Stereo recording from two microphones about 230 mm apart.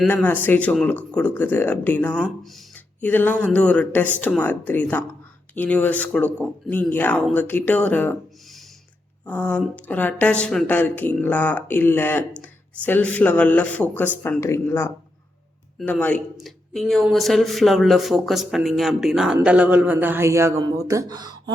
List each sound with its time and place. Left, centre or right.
0.0 s speech: centre
9.2 s speech: centre